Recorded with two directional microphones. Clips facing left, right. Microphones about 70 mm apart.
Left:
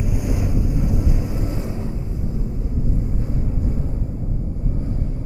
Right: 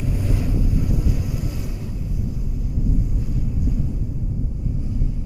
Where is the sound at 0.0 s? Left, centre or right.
Centre; by 3.7 s left.